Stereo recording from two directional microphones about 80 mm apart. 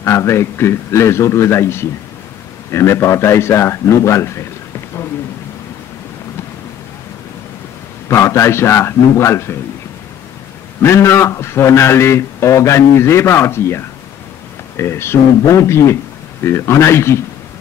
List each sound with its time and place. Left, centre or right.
0.0 s a man's voice: left
8.1 s a man's voice: left
10.8 s a man's voice: left